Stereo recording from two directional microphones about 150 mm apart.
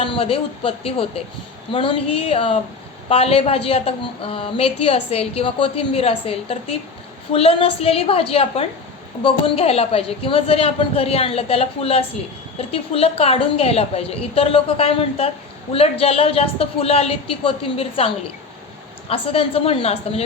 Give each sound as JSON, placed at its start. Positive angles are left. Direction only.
{"t": 0.0, "sound": "a woman's voice", "side_deg": 40}